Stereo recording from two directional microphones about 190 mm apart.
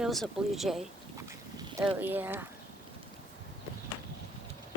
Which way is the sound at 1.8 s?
10° right (ahead or behind).